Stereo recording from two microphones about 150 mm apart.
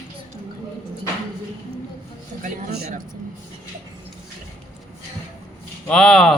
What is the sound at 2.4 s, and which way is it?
Speech, 75° right (ahead or behind).